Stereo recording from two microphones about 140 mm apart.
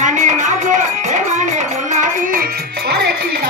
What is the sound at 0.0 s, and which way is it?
Music, 60° right (ahead or behind).